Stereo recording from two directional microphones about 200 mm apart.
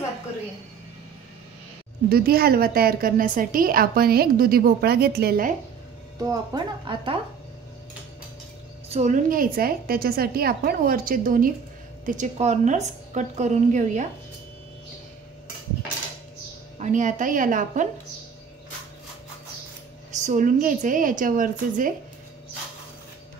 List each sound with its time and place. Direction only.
2.0 s a woman's voice: 50° right (ahead or behind)
6.2 s speech: 20° right (ahead or behind)
8.8 s a woman's voice: 35° right (ahead or behind)
16.7 s a woman's voice: 35° right (ahead or behind)
20.1 s a woman's voice: 35° right (ahead or behind)